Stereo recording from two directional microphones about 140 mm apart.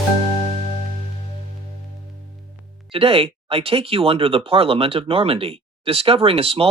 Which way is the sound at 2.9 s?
40° right (ahead or behind).